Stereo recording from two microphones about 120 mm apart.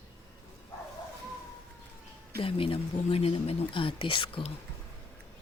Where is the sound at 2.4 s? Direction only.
50° left (ahead or behind).